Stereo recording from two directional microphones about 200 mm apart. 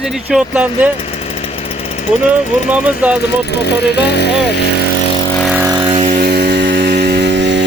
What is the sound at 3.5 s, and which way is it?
Speech, 55° left (ahead or behind).